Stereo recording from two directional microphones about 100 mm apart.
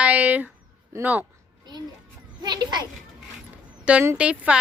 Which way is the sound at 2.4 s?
45° right (ahead or behind).